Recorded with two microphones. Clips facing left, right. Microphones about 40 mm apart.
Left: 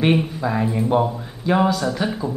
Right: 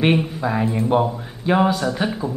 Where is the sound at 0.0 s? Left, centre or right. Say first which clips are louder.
Even; centre.